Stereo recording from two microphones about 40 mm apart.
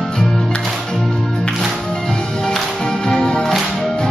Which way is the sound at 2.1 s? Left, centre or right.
Centre.